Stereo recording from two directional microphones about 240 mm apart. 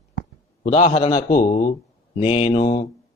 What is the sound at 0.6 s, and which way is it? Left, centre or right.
Speech, left.